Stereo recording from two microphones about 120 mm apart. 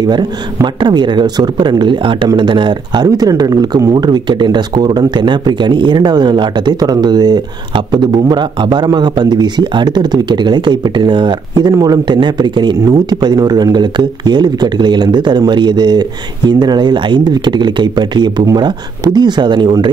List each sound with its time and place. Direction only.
0.0 s speech: 35° right (ahead or behind)